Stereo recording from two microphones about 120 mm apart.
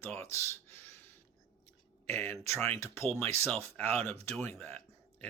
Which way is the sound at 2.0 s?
15° left (ahead or behind).